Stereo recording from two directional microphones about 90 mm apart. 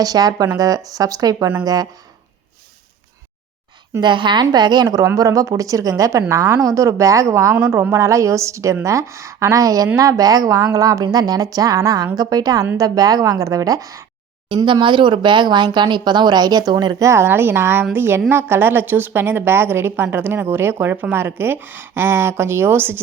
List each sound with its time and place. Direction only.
0.0 s a woman's voice: 45° right (ahead or behind)
4.0 s a woman's voice: 60° right (ahead or behind); by 14.0 s 40° right (ahead or behind)
14.5 s speech: 65° right (ahead or behind); by 17.1 s 45° right (ahead or behind)
17.1 s a woman's voice: 25° right (ahead or behind)